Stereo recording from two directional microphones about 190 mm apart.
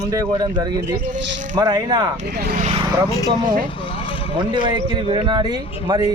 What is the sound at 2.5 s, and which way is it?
Speech, 40° right (ahead or behind).